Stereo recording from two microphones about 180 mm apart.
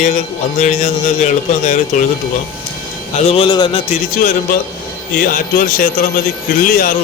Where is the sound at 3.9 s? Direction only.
50° left (ahead or behind).